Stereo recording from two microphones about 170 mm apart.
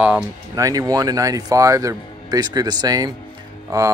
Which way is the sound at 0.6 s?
20° right (ahead or behind).